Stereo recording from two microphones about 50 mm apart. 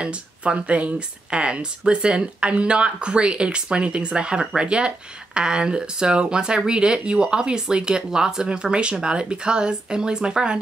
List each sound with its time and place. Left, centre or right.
0.0 s speech: right